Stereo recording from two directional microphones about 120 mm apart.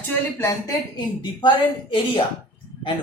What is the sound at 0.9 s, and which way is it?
Speech, 40° left (ahead or behind).